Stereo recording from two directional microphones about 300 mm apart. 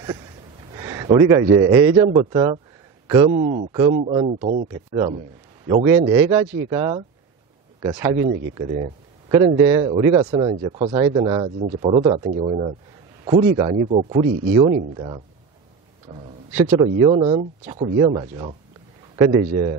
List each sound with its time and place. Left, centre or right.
0.7 s a sound: centre
1.7 s speech: centre
8.7 s a sound: centre
9.6 s speech: centre
12.0 s speech: centre
12.3 s speech: right
16.5 s speech: centre
16.8 s speech: centre